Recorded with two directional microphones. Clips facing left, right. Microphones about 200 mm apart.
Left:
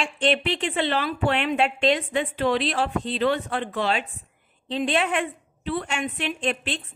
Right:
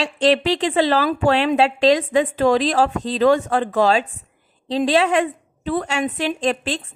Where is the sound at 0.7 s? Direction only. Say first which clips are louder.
Right 8 dB; 90° right.